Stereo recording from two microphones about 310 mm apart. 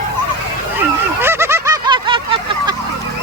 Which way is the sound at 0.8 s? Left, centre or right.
Centre.